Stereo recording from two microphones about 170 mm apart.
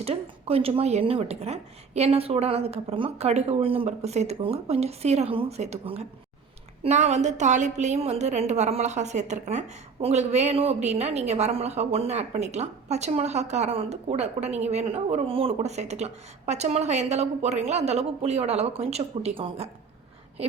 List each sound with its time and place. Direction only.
0.0 s a woman's voice: 35° right (ahead or behind)